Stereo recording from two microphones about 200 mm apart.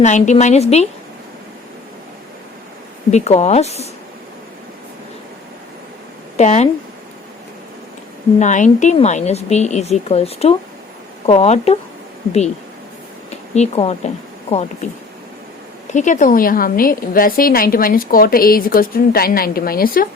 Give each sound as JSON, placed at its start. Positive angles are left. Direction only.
{"t": 0.0, "sound": "speech", "side_deg": 35}
{"t": 3.1, "sound": "speech", "side_deg": 35}
{"t": 6.3, "sound": "speech", "side_deg": 35}
{"t": 8.4, "sound": "speech", "side_deg": 35}
{"t": 13.3, "sound": "speech", "side_deg": 35}
{"t": 15.9, "sound": "a woman's voice", "side_deg": 40}